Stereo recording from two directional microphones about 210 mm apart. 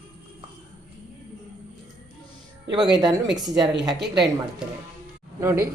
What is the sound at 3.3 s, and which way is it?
Speech, 20° right (ahead or behind).